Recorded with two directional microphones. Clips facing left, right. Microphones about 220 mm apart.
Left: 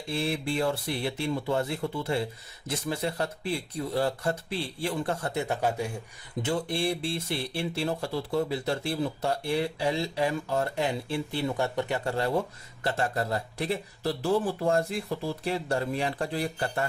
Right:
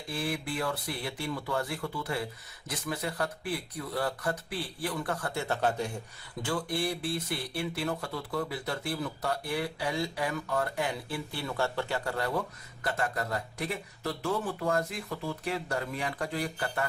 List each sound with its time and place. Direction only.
0.1 s speech: 25° left (ahead or behind); by 6.0 s 10° left (ahead or behind)
6.4 s speech: 25° left (ahead or behind)